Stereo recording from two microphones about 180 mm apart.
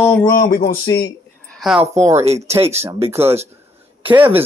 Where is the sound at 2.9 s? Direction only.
35° right (ahead or behind).